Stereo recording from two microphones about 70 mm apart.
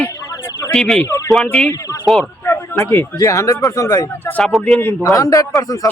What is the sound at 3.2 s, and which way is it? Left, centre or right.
Speech, left.